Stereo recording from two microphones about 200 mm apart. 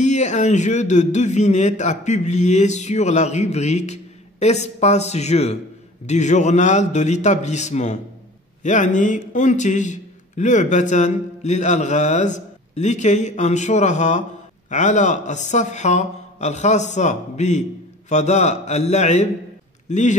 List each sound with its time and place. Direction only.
0.0 s a man's voice: 35° left (ahead or behind)